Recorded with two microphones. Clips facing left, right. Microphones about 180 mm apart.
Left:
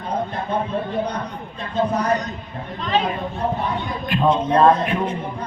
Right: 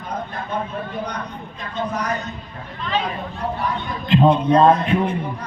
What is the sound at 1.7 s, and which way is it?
Speech, 30° left (ahead or behind).